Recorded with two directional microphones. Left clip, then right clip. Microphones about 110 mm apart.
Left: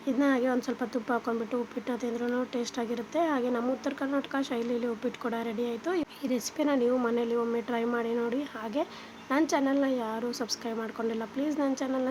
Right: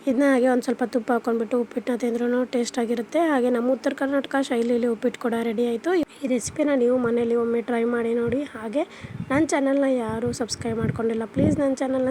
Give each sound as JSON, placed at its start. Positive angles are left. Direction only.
{"t": 0.0, "sound": "speech", "side_deg": -50}